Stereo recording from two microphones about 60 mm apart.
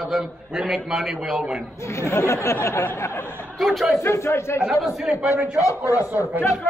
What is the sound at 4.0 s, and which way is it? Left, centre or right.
Speech, left.